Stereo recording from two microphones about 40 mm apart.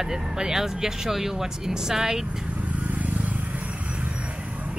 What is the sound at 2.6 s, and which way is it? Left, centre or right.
Vehicle, right.